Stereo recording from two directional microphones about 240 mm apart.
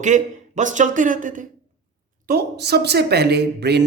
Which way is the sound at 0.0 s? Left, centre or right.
Right.